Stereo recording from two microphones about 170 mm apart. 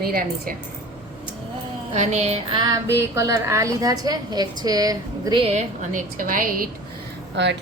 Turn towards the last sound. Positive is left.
turn(degrees=-90)